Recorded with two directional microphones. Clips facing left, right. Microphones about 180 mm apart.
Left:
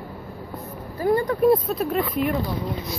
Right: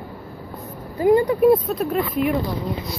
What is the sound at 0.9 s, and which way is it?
Speech, 15° right (ahead or behind).